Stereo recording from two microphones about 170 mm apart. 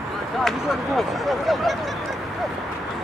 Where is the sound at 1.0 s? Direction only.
Centre (ahead or behind).